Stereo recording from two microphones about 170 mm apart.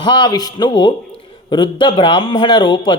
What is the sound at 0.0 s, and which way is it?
A man's voice, 25° left (ahead or behind).